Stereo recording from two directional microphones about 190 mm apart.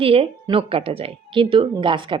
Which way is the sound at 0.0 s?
30° right (ahead or behind).